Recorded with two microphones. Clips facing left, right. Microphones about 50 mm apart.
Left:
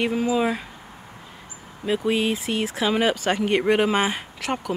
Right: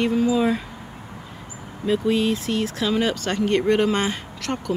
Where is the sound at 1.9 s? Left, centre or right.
Centre.